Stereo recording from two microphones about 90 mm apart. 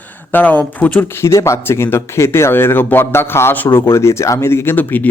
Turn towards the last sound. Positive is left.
turn(degrees=20)  # may be behind; listen again after turning